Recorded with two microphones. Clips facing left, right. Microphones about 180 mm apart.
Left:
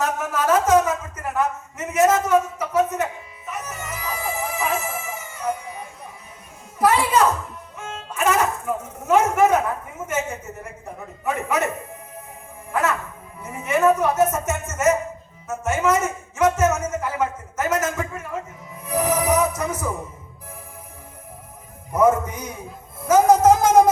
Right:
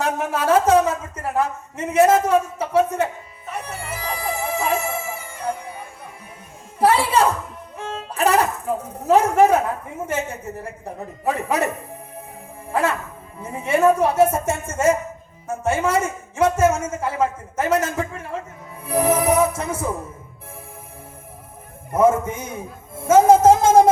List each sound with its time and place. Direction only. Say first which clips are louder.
0.0 s a sound: right 1 dB; 30° right (ahead or behind)
6.7 s music: right 1 dB; 30° right (ahead or behind)
10.1 s speech: even; 30° right (ahead or behind)
12.7 s speech: right 1 dB; 30° right (ahead or behind)
15.4 s a sound: even; 30° right (ahead or behind)
18.9 s music: right 2 dB; 30° right (ahead or behind)
21.9 s speech: right 1 dB; 25° right (ahead or behind)